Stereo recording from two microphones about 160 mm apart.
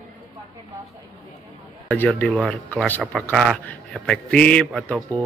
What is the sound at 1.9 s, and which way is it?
Speech, 10° left (ahead or behind).